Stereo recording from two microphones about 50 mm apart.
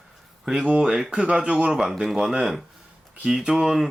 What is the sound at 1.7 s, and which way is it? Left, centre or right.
Speech, centre.